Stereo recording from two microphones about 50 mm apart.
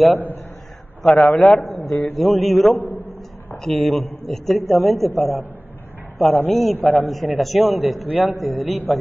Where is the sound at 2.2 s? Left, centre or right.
Centre.